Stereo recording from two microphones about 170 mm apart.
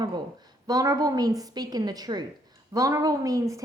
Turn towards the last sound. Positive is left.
turn(degrees=-20)  # may be behind; listen again after turning